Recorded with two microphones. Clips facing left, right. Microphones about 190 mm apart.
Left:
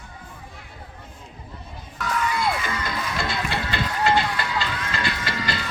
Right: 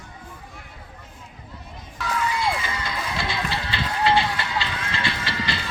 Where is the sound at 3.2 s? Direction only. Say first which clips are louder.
Left 1 dB; 50° left (ahead or behind).